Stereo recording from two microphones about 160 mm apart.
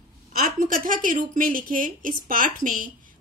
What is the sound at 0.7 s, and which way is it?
Speech, 60° right (ahead or behind).